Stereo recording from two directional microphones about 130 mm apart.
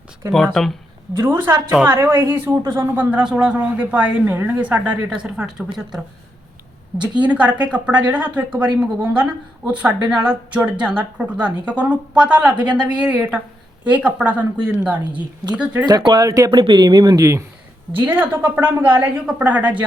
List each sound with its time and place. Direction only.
0.3 s speech: 5° left (ahead or behind)
1.7 s a woman's voice: 15° right (ahead or behind)
7.2 s a woman's voice: 10° right (ahead or behind)
15.9 s speech: 35° right (ahead or behind)
17.9 s a woman's voice: 15° right (ahead or behind)